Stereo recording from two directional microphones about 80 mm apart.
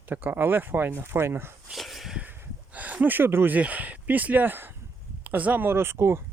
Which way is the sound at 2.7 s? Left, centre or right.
Centre.